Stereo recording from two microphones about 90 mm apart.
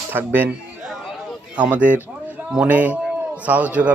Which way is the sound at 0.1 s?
20° right (ahead or behind).